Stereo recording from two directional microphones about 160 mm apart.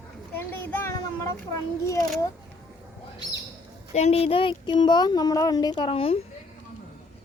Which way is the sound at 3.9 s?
40° left (ahead or behind).